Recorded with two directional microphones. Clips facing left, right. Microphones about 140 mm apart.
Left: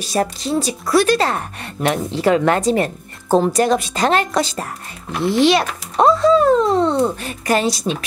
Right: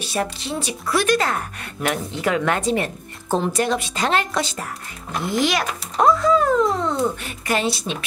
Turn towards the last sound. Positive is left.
turn(degrees=40)  # may be behind; listen again after turning